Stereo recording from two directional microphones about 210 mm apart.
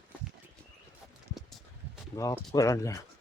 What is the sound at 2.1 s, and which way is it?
Speech, 15° left (ahead or behind).